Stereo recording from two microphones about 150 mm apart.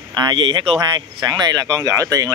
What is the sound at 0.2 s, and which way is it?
Speech, 35° right (ahead or behind).